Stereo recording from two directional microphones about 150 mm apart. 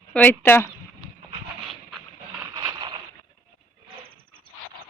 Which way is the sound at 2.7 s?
35° right (ahead or behind).